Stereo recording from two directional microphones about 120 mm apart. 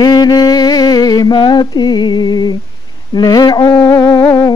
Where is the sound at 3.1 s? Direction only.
35° left (ahead or behind).